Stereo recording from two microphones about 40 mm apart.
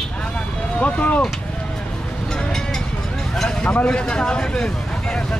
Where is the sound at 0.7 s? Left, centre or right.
Left.